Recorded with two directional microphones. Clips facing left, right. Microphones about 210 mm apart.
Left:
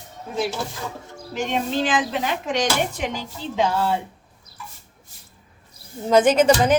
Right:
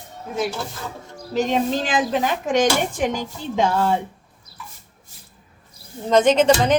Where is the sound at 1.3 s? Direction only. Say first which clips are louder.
Right 3 dB; 40° right (ahead or behind).